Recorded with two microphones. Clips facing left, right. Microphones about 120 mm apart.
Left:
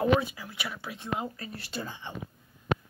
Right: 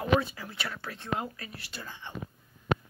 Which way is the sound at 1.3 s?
30° left (ahead or behind).